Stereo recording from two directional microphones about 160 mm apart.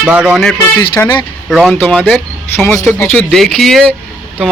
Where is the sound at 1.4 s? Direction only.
Centre (ahead or behind).